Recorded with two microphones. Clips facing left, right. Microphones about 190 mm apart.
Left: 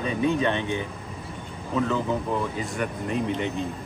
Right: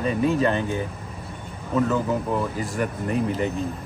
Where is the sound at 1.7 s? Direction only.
5° right (ahead or behind).